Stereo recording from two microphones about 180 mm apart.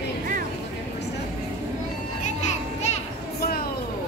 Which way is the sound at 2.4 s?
40° left (ahead or behind).